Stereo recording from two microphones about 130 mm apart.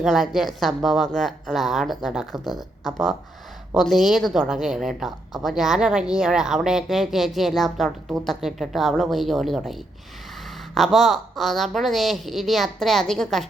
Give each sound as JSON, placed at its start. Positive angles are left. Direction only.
{"t": 0.0, "sound": "a woman's voice", "side_deg": 0}